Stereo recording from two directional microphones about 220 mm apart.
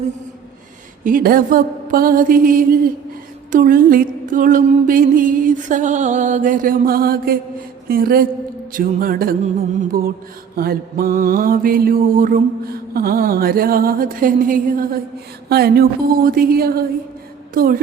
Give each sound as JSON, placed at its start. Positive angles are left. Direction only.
{"t": 1.0, "sound": "mantra", "side_deg": -40}
{"t": 15.4, "sound": "speech", "side_deg": -45}